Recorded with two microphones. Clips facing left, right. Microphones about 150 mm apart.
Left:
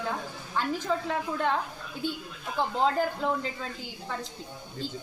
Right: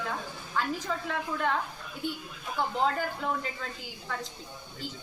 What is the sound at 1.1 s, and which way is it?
Speech, 25° left (ahead or behind).